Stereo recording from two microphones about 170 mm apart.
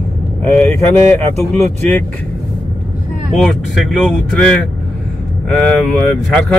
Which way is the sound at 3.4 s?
Centre (ahead or behind).